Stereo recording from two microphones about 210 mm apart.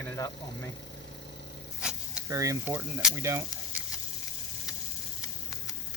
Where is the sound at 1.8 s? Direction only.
5° right (ahead or behind).